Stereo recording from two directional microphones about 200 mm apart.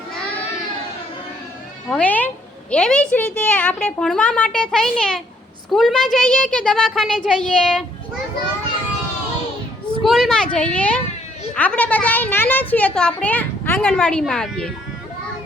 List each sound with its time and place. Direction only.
1.9 s a woman's voice: 5° left (ahead or behind)
10.0 s a woman's voice: centre (ahead or behind)